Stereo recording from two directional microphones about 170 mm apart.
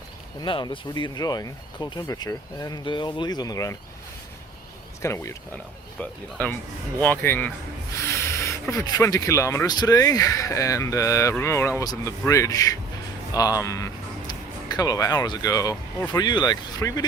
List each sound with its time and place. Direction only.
0.4 s speech: 30° left (ahead or behind)
5.0 s speech: 15° left (ahead or behind)